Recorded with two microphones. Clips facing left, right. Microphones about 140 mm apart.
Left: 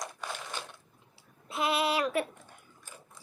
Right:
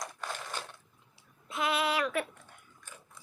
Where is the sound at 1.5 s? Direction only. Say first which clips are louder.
Left 2 dB; 30° left (ahead or behind).